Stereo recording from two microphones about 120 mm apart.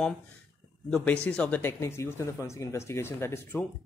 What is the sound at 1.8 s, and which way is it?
Speech, 25° left (ahead or behind).